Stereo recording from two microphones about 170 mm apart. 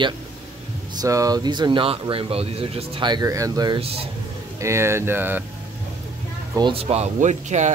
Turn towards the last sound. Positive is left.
turn(degrees=-45)  # may be behind; listen again after turning